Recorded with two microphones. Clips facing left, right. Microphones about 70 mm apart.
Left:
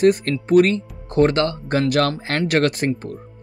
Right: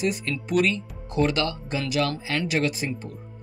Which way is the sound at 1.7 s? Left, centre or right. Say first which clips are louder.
Left 7 dB; left.